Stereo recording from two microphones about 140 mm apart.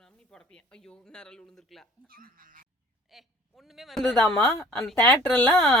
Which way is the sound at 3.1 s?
Centre (ahead or behind).